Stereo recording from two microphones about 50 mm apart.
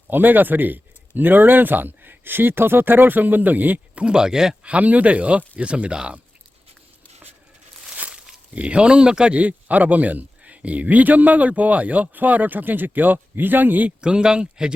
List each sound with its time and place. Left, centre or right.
0.1 s speech: right
4.0 s speech: centre
4.6 s speech: right
8.5 s speech: right
9.4 s speech: right
14.0 s speech: centre